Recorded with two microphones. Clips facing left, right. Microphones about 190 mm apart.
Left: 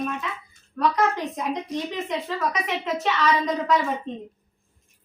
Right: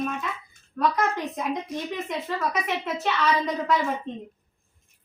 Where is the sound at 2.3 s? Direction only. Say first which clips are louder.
Left 1 dB; 5° right (ahead or behind).